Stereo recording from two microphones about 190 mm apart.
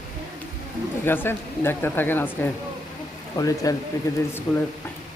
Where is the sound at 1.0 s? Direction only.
10° left (ahead or behind).